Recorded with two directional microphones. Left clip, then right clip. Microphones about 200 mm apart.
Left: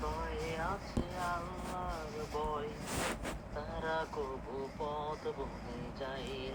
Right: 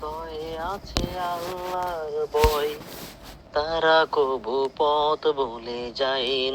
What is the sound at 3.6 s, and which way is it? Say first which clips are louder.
Mantra: right 19 dB; 50° right (ahead or behind).